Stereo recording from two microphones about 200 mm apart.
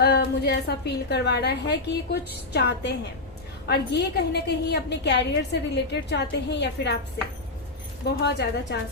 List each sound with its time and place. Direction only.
0.0 s a woman's voice: 55° left (ahead or behind)
8.0 s a woman's voice: 60° left (ahead or behind)